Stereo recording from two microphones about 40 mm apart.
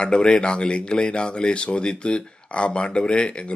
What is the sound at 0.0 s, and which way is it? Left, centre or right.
Speech, left.